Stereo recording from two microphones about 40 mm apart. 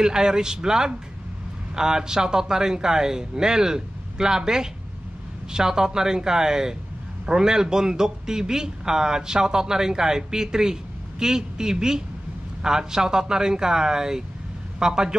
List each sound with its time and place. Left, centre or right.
0.0 s speech: centre